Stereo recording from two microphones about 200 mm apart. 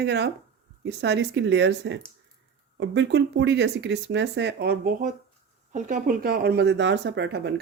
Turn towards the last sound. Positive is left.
turn(degrees=-60)  # may be behind; listen again after turning